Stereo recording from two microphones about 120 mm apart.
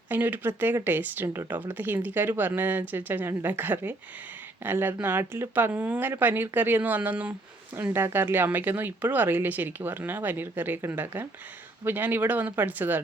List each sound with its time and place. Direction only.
0.1 s speech: 15° right (ahead or behind)